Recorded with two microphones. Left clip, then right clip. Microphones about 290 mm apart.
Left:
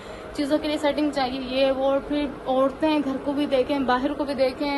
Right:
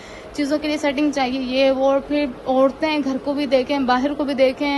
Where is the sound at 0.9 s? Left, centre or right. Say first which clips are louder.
Right 4 dB; right.